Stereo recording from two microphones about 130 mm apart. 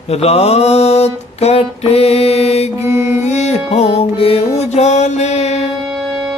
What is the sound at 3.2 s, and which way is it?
Mantra, 60° left (ahead or behind).